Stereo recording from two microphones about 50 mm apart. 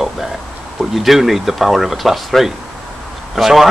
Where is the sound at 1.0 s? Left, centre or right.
Centre.